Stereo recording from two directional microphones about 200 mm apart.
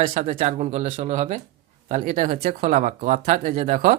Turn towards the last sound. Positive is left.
turn(degrees=-40)  # may be behind; listen again after turning